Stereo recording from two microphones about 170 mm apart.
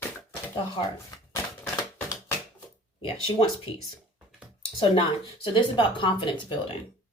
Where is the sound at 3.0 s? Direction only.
35° left (ahead or behind).